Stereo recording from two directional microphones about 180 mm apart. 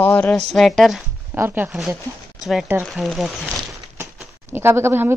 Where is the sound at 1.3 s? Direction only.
10° right (ahead or behind).